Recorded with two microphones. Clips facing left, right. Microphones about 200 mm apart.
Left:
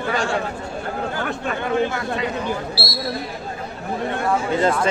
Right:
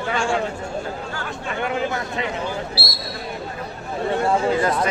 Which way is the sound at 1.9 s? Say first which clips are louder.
Left 2 dB; 20° right (ahead or behind).